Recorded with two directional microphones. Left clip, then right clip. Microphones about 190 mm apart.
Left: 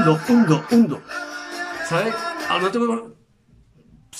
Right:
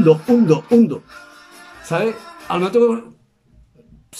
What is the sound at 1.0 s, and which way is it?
Music, 35° left (ahead or behind).